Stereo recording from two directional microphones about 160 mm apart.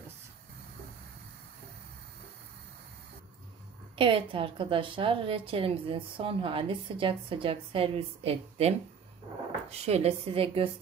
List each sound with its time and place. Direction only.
3.9 s a woman's voice: 35° right (ahead or behind)